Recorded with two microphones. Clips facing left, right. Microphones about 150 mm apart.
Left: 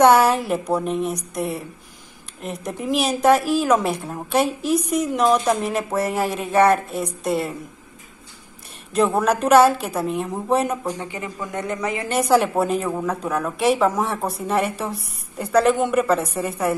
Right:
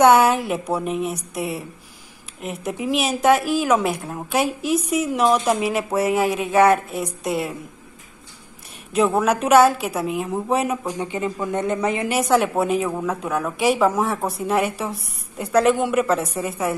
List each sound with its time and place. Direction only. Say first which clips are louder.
0.0 s a woman's voice: even; centre (ahead or behind)
8.9 s a woman's voice: even; centre (ahead or behind)
11.0 s speech: right 5 dB; 20° right (ahead or behind)
12.1 s a woman's voice: left 3 dB; centre (ahead or behind)